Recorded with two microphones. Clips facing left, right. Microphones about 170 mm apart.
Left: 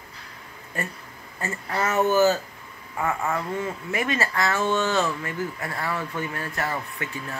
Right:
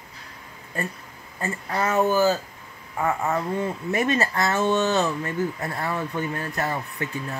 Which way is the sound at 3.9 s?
40° right (ahead or behind).